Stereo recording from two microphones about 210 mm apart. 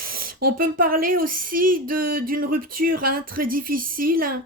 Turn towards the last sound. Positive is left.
turn(degrees=-45)  # may be behind; listen again after turning